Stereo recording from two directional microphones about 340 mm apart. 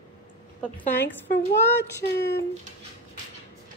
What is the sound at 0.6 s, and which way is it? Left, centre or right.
Speech, centre.